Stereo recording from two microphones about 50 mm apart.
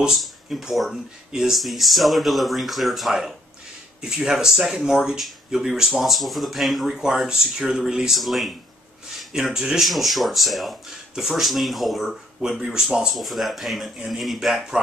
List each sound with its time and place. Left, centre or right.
0.0 s speech: centre